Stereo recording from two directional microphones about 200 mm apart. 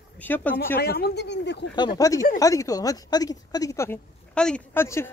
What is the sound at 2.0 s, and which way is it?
Speech, 15° left (ahead or behind).